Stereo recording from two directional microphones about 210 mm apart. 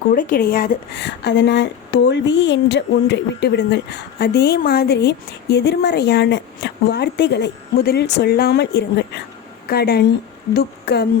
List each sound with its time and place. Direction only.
0.1 s speech: 40° left (ahead or behind)